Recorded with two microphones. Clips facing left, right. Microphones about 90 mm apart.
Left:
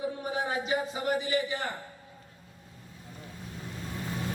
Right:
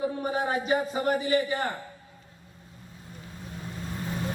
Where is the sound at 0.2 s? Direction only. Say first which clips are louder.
Right 4 dB; 45° right (ahead or behind).